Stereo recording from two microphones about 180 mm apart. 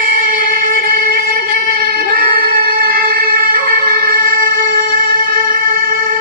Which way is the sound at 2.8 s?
55° right (ahead or behind).